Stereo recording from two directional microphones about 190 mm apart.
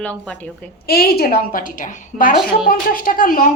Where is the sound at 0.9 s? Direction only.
55° left (ahead or behind).